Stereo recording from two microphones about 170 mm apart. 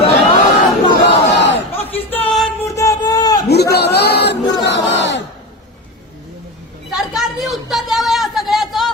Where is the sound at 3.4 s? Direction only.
75° left (ahead or behind).